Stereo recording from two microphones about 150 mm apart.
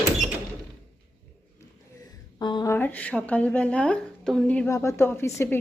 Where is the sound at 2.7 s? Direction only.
10° left (ahead or behind).